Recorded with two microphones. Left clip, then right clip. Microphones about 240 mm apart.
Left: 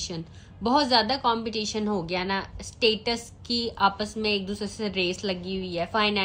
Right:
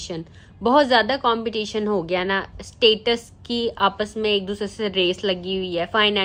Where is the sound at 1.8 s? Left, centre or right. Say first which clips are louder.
Right 6 dB; right.